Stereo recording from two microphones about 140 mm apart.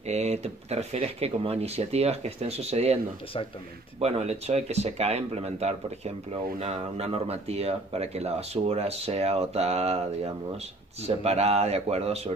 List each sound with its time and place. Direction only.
0.0 s speech: 50° right (ahead or behind)
3.3 s speech: 40° left (ahead or behind)
4.0 s speech: 50° right (ahead or behind)